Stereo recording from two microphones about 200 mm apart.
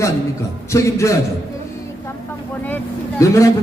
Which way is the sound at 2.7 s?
15° left (ahead or behind).